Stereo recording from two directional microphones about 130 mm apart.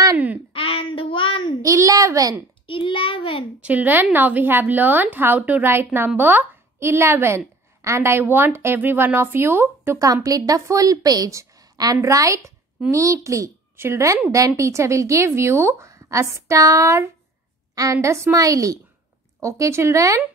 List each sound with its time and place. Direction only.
0.5 s child singing: 45° left (ahead or behind)
1.6 s a sound: 25° right (ahead or behind)
2.6 s a child's voice: 40° left (ahead or behind)
3.6 s a woman's voice: 15° right (ahead or behind)